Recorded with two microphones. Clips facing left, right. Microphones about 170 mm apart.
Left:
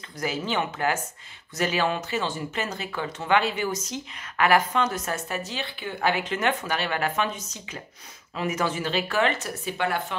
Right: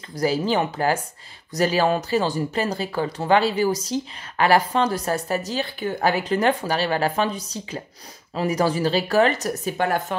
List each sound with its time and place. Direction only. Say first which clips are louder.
0.1 s speech: right 7 dB; 35° right (ahead or behind)